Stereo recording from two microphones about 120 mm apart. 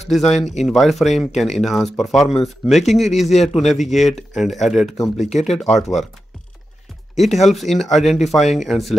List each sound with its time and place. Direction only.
0.1 s speech: centre (ahead or behind)
7.2 s speech: centre (ahead or behind)